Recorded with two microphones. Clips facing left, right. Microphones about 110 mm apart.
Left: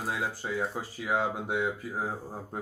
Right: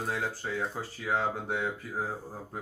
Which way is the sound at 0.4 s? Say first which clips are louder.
Left 1 dB; 15° left (ahead or behind).